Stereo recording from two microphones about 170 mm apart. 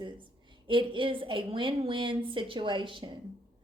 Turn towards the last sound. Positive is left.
turn(degrees=-30)  # may be behind; listen again after turning